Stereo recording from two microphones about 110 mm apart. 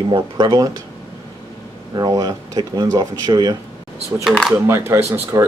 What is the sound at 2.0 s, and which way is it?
Speech, 35° right (ahead or behind).